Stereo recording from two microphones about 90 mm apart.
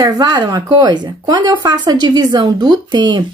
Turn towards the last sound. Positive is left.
turn(degrees=-55)  # may be behind; listen again after turning